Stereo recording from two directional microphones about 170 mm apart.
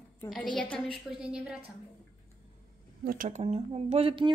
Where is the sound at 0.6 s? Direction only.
5° left (ahead or behind).